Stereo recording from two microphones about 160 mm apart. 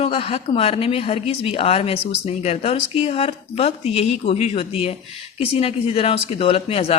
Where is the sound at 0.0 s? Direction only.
35° left (ahead or behind).